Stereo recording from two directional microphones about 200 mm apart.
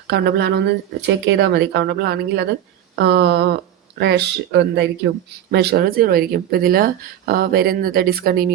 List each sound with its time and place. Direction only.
0.1 s speech: 55° right (ahead or behind)